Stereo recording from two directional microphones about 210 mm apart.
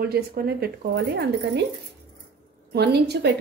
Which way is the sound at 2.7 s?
50° right (ahead or behind).